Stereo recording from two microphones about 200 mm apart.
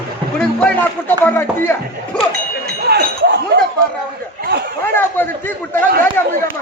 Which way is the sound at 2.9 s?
55° right (ahead or behind).